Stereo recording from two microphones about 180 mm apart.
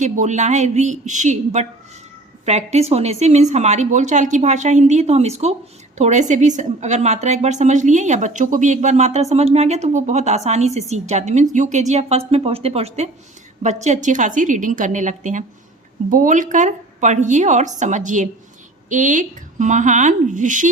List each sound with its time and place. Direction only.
0.0 s a woman's voice: 40° right (ahead or behind)